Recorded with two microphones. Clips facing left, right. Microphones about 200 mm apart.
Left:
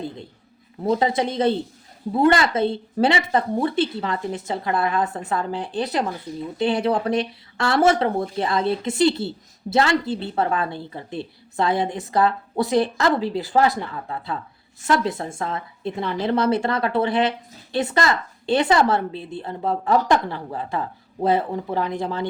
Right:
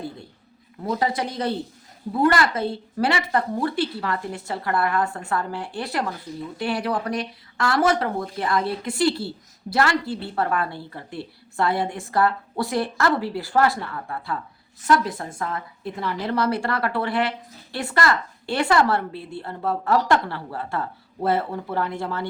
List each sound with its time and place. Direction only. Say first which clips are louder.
0.9 s speech: left 4 dB; 25° left (ahead or behind)